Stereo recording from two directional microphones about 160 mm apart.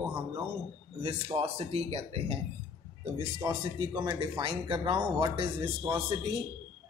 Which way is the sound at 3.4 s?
25° right (ahead or behind).